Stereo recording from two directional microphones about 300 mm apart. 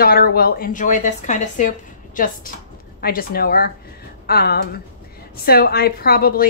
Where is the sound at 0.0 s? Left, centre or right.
Left.